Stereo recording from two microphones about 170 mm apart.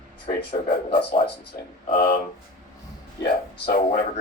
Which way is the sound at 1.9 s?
60° left (ahead or behind).